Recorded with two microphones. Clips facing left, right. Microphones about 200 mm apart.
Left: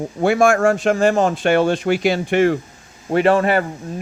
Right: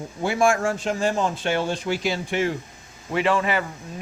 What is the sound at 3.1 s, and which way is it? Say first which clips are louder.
Speech: left 7 dB; 50° left (ahead or behind).